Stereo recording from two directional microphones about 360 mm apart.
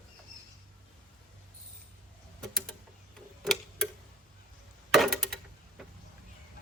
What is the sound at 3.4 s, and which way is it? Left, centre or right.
Tick-tock, centre.